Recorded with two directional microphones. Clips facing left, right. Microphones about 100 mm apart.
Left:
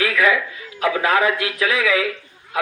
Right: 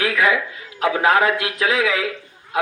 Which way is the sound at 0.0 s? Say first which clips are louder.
Even; 25° right (ahead or behind).